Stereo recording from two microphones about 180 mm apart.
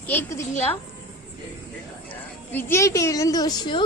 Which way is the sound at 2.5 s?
10° left (ahead or behind).